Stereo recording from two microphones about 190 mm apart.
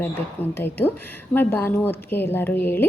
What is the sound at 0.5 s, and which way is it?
A woman's voice, 10° left (ahead or behind).